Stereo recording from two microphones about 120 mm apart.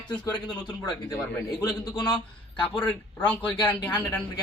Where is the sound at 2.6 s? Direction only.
15° left (ahead or behind).